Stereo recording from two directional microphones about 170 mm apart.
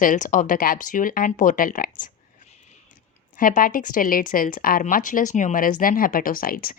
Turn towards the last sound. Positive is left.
turn(degrees=60)  # may be behind; listen again after turning